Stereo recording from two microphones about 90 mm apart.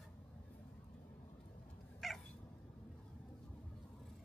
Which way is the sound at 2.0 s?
Centre (ahead or behind).